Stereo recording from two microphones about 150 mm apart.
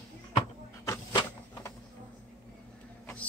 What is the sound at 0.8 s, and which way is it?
Vehicle, 20° left (ahead or behind).